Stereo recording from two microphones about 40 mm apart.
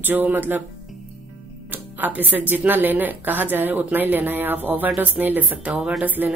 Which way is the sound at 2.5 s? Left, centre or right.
Right.